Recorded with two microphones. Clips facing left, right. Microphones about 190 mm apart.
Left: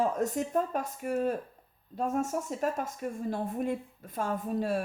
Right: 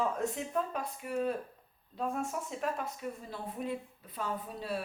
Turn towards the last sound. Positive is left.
turn(degrees=45)  # may be behind; listen again after turning